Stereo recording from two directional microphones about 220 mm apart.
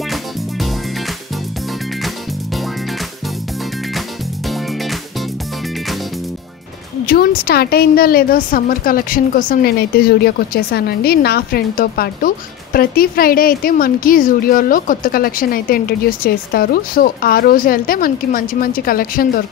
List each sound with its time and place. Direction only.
7.1 s a woman's voice: 45° left (ahead or behind)